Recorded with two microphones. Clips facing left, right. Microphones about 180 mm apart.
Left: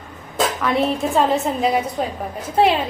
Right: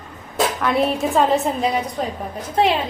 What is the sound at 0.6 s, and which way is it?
Speech, centre (ahead or behind).